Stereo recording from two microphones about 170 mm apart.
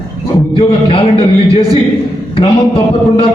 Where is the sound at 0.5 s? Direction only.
30° left (ahead or behind).